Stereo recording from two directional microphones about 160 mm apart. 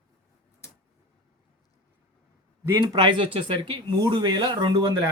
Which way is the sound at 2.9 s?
30° right (ahead or behind).